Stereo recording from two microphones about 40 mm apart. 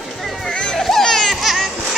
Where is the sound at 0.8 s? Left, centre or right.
Centre.